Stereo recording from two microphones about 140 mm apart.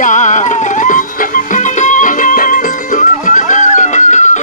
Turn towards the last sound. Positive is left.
turn(degrees=60)  # may be behind; listen again after turning